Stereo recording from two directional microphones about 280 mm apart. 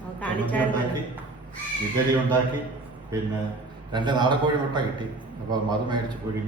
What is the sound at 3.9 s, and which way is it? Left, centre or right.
A man's voice, centre.